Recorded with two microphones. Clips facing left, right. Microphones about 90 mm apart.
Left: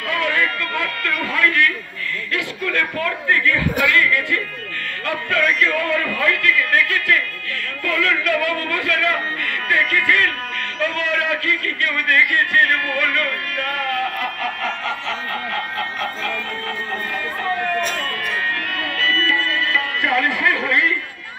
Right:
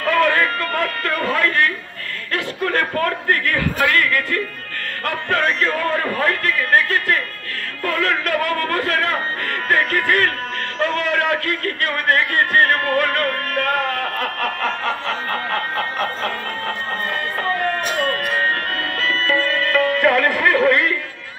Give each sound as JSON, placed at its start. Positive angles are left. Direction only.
{"t": 0.0, "sound": "a man's voice", "side_deg": -40}
{"t": 2.3, "sound": "chuckle", "side_deg": -40}
{"t": 3.8, "sound": "a man's voice", "side_deg": -45}
{"t": 17.7, "sound": "music", "side_deg": -50}